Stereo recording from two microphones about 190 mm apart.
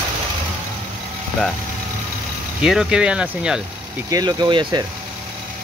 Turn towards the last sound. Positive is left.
turn(degrees=-25)  # may be behind; listen again after turning